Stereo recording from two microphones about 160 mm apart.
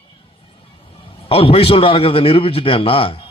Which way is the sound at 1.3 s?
35° left (ahead or behind).